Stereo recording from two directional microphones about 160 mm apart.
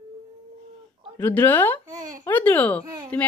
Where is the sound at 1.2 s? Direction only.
15° left (ahead or behind).